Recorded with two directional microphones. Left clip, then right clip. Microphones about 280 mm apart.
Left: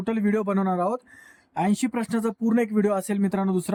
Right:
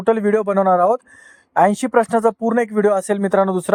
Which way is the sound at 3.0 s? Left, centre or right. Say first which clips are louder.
Right 12 dB; right.